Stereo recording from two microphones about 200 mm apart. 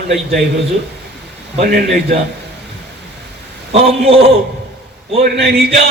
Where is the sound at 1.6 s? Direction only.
55° right (ahead or behind).